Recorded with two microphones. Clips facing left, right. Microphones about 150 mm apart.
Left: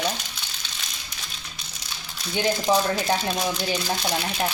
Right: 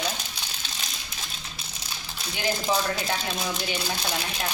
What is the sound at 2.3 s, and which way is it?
Speech, 35° left (ahead or behind).